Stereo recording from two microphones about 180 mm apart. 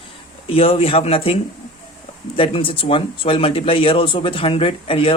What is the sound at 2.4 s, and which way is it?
Speech, 30° left (ahead or behind).